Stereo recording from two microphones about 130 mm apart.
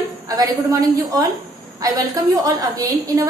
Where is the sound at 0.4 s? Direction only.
30° right (ahead or behind).